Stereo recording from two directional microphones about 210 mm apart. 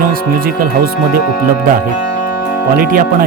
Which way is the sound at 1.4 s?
40° right (ahead or behind).